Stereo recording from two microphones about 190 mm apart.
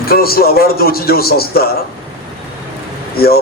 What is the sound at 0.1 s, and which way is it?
A man's voice, 55° left (ahead or behind).